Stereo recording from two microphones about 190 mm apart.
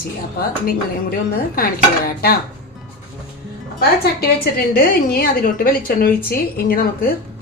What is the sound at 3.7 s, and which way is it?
A woman's voice, 55° left (ahead or behind).